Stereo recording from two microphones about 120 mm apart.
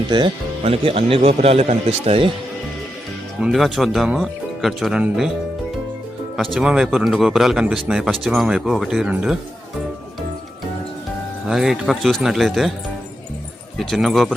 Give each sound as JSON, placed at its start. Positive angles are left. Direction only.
{"t": 0.1, "sound": "speech", "side_deg": -40}
{"t": 0.6, "sound": "a man's voice", "side_deg": -55}
{"t": 3.4, "sound": "speech", "side_deg": 0}
{"t": 6.3, "sound": "speech", "side_deg": -5}
{"t": 11.4, "sound": "speech", "side_deg": -5}
{"t": 13.7, "sound": "speech", "side_deg": 0}